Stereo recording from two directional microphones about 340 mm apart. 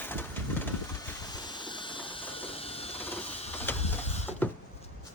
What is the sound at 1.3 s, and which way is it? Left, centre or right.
Mechanisms, centre.